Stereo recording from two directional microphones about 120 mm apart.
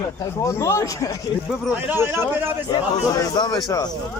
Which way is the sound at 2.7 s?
30° left (ahead or behind).